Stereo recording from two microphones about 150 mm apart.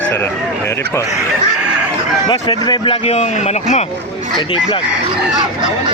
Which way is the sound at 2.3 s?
30° left (ahead or behind).